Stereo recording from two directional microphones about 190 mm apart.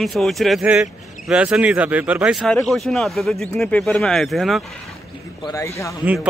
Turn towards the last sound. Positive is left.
turn(degrees=15)  # may be behind; listen again after turning